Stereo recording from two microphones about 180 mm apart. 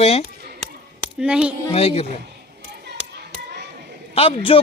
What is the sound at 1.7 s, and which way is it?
Speech, 35° left (ahead or behind).